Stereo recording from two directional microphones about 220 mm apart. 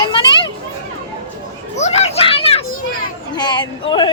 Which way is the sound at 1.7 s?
30° left (ahead or behind).